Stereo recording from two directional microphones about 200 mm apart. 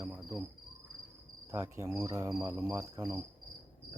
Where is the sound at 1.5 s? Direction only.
10° right (ahead or behind).